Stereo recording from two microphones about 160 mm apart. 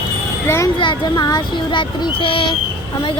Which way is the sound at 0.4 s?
15° left (ahead or behind).